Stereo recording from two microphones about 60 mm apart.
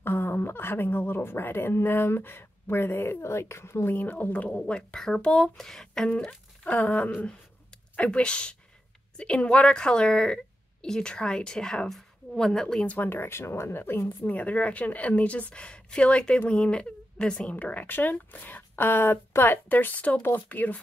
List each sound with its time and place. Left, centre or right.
0.0 s a woman's voice: left; by 6.0 s centre
6.0 s a woman's voice: centre
12.8 s speech: left
14.0 s speech: left